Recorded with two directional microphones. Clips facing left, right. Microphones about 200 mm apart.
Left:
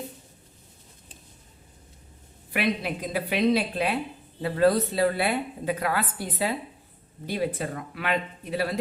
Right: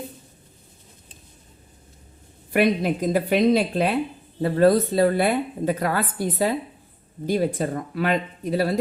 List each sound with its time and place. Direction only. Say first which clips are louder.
2.5 s a woman's voice: right 7 dB; 45° right (ahead or behind)
7.3 s speech: right 6 dB; 40° right (ahead or behind)